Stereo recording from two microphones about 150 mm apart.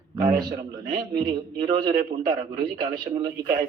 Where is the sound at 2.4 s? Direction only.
75° right (ahead or behind).